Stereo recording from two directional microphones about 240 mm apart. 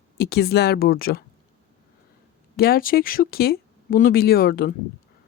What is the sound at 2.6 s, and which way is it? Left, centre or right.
Speech, left.